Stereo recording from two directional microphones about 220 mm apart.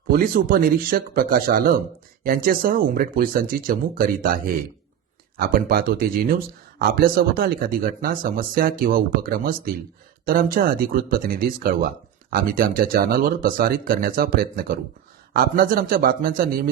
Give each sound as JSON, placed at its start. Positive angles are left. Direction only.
{"t": 0.1, "sound": "speech", "side_deg": -40}
{"t": 5.4, "sound": "speech", "side_deg": -40}